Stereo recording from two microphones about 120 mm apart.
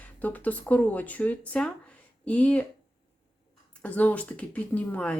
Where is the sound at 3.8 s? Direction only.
10° left (ahead or behind).